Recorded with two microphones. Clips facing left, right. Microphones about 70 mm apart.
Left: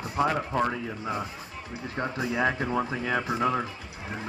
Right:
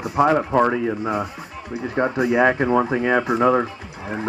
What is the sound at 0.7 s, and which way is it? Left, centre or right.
Speech, right.